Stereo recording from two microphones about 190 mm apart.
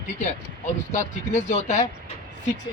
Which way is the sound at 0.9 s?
40° left (ahead or behind).